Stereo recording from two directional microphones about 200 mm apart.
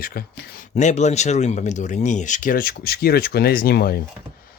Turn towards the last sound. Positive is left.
turn(degrees=50)  # may be behind; listen again after turning